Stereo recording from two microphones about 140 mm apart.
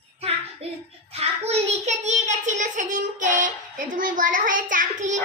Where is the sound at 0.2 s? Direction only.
45° right (ahead or behind).